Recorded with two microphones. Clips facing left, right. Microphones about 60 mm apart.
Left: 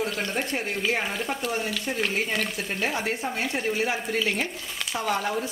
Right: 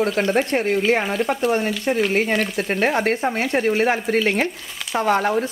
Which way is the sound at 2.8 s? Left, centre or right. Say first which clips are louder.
Right 8 dB; right.